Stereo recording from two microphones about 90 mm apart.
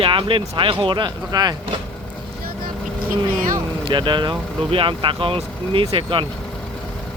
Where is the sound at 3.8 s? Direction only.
60° right (ahead or behind); by 6.2 s 80° right.